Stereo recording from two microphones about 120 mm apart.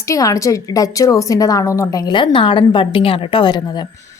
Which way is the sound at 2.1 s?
45° left (ahead or behind).